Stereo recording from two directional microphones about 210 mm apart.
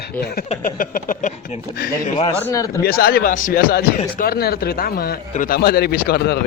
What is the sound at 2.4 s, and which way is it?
Speech, 15° left (ahead or behind).